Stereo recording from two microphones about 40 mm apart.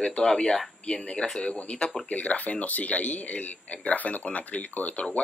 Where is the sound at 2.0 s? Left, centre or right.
Left.